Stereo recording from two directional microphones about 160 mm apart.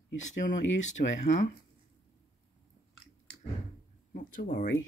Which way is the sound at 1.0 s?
70° left (ahead or behind).